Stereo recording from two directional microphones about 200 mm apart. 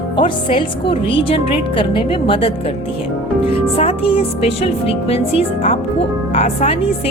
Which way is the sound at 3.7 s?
30° left (ahead or behind).